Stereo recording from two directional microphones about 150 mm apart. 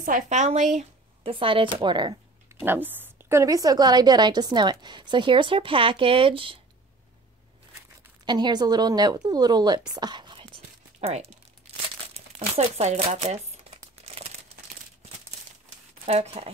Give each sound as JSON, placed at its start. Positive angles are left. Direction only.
{"t": 0.0, "sound": "a woman's voice", "side_deg": -60}
{"t": 1.3, "sound": "speech", "side_deg": -35}
{"t": 2.6, "sound": "a woman's voice", "side_deg": -15}
{"t": 8.3, "sound": "a woman's voice", "side_deg": -30}
{"t": 11.0, "sound": "speech", "side_deg": -45}
{"t": 12.1, "sound": "crumpling", "side_deg": -40}
{"t": 16.1, "sound": "speech", "side_deg": -45}